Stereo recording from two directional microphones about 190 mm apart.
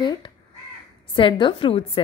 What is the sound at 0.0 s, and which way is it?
Crow, 25° left (ahead or behind).